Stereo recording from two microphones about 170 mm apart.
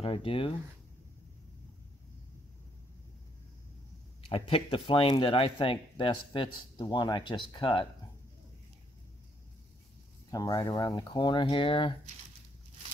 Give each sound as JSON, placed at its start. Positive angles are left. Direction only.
{"t": 0.0, "sound": "speech", "side_deg": 30}
{"t": 4.3, "sound": "speech", "side_deg": 30}
{"t": 10.3, "sound": "speech", "side_deg": 20}